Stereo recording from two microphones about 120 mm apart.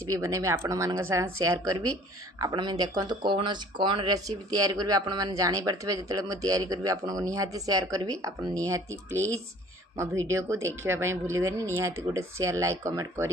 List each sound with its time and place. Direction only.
0.1 s a woman's voice: 25° right (ahead or behind)